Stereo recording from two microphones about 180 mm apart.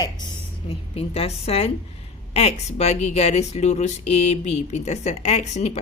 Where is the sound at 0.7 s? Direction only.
35° left (ahead or behind).